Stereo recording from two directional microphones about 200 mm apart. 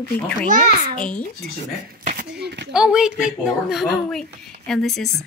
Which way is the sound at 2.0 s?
50° right (ahead or behind).